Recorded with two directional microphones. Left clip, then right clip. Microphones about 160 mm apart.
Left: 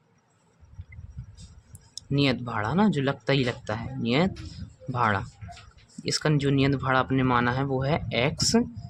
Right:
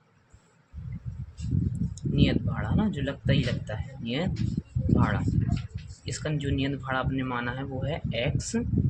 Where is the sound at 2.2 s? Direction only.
65° left (ahead or behind).